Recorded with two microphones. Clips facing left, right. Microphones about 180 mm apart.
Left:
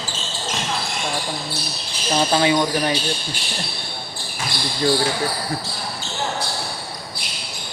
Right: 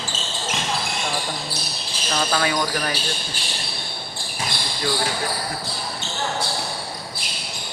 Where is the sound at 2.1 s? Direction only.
25° left (ahead or behind).